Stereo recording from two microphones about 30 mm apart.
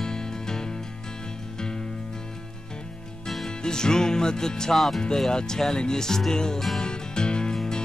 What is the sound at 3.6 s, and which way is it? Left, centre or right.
Music, left.